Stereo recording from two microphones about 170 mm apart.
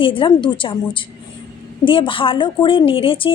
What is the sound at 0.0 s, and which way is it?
A woman's voice, 30° left (ahead or behind).